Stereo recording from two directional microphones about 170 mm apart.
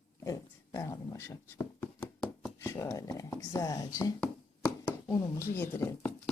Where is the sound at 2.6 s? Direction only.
15° left (ahead or behind).